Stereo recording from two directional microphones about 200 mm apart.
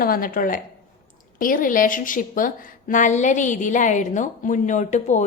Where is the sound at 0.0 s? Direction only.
45° left (ahead or behind).